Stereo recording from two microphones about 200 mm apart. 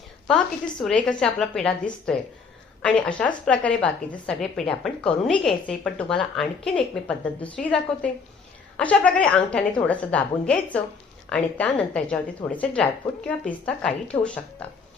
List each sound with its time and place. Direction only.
0.3 s a woman's voice: centre (ahead or behind)